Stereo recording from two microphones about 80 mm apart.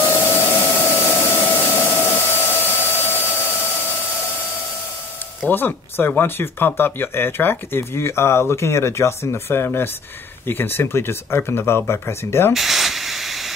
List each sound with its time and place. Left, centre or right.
0.1 s a sound: left
5.5 s speech: left
12.5 s hiss: centre